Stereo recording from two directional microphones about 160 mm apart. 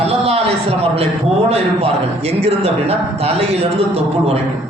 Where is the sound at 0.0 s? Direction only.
40° right (ahead or behind).